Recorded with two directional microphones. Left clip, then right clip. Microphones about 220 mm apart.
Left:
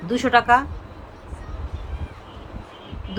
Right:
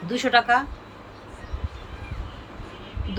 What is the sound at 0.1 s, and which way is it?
Speech, 20° left (ahead or behind).